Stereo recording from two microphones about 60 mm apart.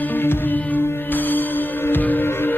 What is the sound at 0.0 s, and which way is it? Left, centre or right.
Music, left.